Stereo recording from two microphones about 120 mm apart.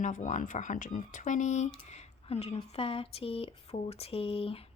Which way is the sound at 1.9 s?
65° left (ahead or behind).